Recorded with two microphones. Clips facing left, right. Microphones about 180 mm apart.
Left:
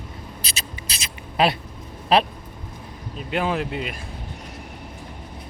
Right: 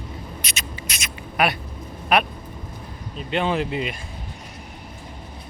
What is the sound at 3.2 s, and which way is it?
Speech, 5° left (ahead or behind).